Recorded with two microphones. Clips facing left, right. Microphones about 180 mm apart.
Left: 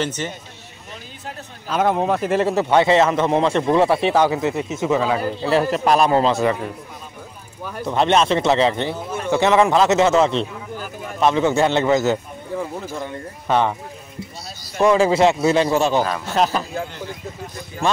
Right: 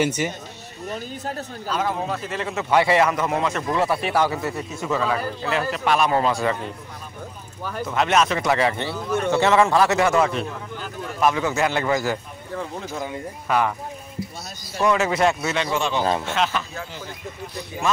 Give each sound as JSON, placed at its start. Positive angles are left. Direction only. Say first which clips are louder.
{"t": 0.0, "sound": "speech", "louder": "right 2 dB", "side_deg": -10}
{"t": 0.8, "sound": "speech", "louder": "right 6 dB", "side_deg": -40}
{"t": 1.7, "sound": "speech", "louder": "left 7 dB", "side_deg": 60}
{"t": 2.7, "sound": "speech", "louder": "left 1 dB", "side_deg": 25}
{"t": 7.8, "sound": "speech", "louder": "left 3 dB", "side_deg": 30}
{"t": 12.5, "sound": "speech", "louder": "left 3 dB", "side_deg": 5}
{"t": 13.5, "sound": "speech", "louder": "left 3 dB", "side_deg": 25}
{"t": 14.8, "sound": "a man's voice", "louder": "left 5 dB", "side_deg": 30}